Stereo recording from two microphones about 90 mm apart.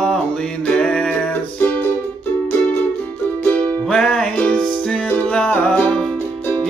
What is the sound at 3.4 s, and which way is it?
Music, 15° left (ahead or behind).